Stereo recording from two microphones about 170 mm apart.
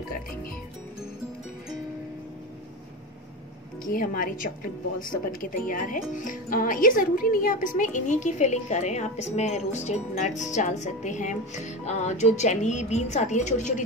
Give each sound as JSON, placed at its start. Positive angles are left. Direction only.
{"t": 3.8, "sound": "a woman's voice", "side_deg": 55}